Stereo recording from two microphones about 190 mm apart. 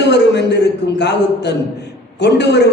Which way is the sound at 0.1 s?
65° left (ahead or behind).